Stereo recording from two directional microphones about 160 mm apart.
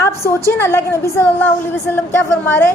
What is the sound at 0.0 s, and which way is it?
A woman's voice, 15° left (ahead or behind).